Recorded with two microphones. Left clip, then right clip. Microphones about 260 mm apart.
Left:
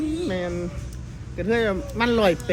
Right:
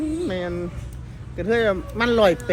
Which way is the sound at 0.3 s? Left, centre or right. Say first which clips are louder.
Right 1 dB; centre.